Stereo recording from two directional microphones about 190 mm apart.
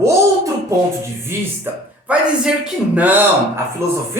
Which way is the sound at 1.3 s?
10° right (ahead or behind).